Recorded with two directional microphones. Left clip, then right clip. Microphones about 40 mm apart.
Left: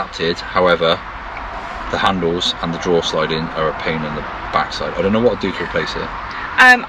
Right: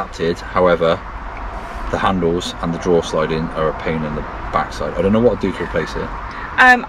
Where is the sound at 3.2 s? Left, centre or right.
Centre.